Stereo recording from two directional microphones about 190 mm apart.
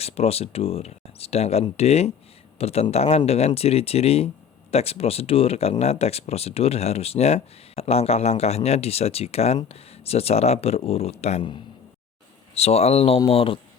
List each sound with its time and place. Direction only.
0.0 s speech: 30° left (ahead or behind)